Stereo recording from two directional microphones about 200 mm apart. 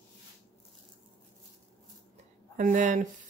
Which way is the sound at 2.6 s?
40° right (ahead or behind).